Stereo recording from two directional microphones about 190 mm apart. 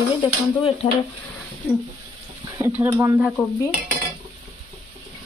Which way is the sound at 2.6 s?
10° right (ahead or behind).